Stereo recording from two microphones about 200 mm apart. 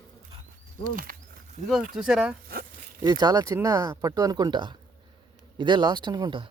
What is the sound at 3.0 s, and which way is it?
Speech, 20° right (ahead or behind).